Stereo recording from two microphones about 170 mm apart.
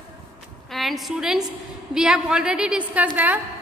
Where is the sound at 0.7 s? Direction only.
Centre (ahead or behind).